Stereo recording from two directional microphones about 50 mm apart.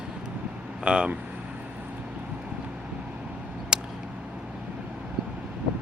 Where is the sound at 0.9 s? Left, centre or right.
Centre.